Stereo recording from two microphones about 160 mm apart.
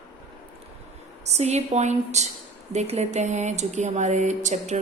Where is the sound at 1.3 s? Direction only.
45° right (ahead or behind).